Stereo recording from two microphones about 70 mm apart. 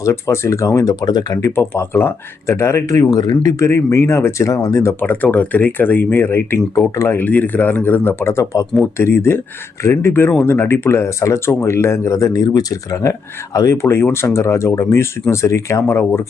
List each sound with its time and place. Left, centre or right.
0.0 s speech: left
1.5 s speech: left
3.1 s speech: left
3.6 s speech: left
4.9 s speech: left
6.9 s speech: left
7.2 s speech: left
13.8 s speech: left